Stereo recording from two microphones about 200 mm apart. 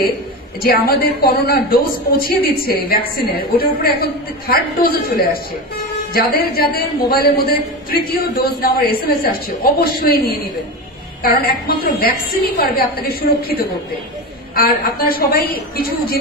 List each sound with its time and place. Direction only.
0.6 s a man's voice: 50° left (ahead or behind)